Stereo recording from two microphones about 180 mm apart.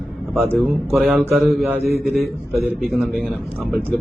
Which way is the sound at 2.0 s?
Centre (ahead or behind).